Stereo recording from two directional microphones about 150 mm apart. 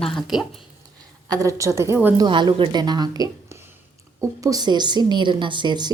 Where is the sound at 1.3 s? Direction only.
20° right (ahead or behind).